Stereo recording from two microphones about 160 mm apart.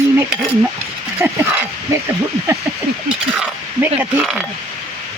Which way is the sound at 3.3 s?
10° right (ahead or behind).